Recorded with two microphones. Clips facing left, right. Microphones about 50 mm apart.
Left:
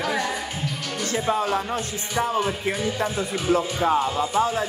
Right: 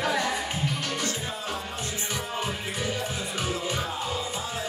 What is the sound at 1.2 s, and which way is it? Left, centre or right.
Music, left.